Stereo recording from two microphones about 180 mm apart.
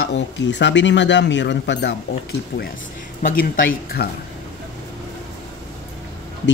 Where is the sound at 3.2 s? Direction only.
50° left (ahead or behind).